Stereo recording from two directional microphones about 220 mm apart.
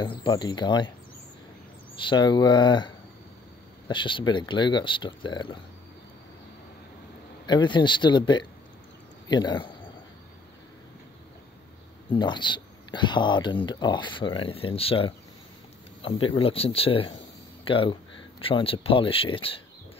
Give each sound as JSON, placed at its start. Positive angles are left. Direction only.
{"t": 0.0, "sound": "speech", "side_deg": 20}
{"t": 2.0, "sound": "speech", "side_deg": 20}
{"t": 7.4, "sound": "speech", "side_deg": 20}
{"t": 12.1, "sound": "speech", "side_deg": 20}